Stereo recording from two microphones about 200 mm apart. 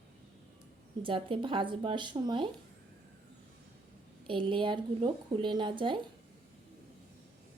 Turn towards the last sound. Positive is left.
turn(degrees=-25)  # may be behind; listen again after turning